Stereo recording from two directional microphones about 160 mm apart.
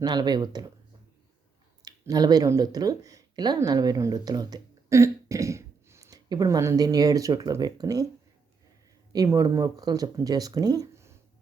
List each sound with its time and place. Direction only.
0.0 s speech: 25° right (ahead or behind)
1.8 s speech: 25° right (ahead or behind)
9.1 s speech: 20° right (ahead or behind)